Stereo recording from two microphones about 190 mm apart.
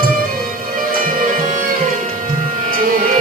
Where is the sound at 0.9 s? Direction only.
45° right (ahead or behind).